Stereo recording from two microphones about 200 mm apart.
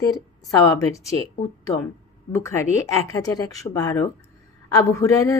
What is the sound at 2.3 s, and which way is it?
A man's voice, 15° left (ahead or behind).